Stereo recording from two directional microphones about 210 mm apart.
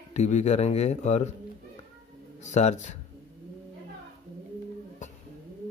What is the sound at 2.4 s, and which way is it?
Speech, 35° left (ahead or behind).